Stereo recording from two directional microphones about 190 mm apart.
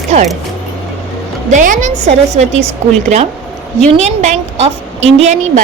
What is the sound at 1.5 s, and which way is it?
A woman's voice, 40° right (ahead or behind).